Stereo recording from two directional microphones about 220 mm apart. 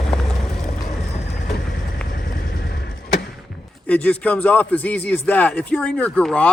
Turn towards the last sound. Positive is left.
turn(degrees=5)  # may be behind; listen again after turning